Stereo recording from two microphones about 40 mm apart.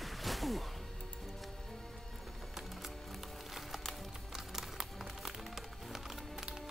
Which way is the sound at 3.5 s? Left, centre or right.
Centre.